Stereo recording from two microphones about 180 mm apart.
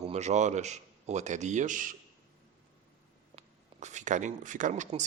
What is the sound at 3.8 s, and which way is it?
Speech, 40° right (ahead or behind).